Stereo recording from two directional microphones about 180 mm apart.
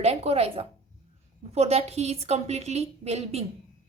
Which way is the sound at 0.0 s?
35° right (ahead or behind).